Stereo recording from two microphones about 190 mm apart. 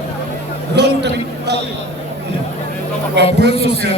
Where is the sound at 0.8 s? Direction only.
60° right (ahead or behind).